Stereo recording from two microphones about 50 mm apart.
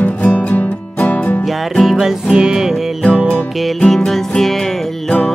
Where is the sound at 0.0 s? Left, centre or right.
Left.